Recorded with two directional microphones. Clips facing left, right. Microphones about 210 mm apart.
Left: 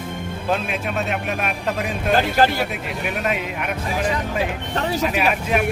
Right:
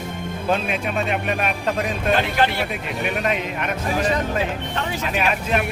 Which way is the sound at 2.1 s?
40° left (ahead or behind).